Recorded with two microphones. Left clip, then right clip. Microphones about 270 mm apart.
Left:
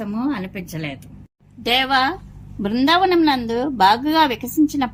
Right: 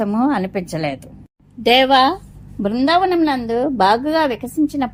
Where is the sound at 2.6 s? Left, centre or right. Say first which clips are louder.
Right 1 dB; centre.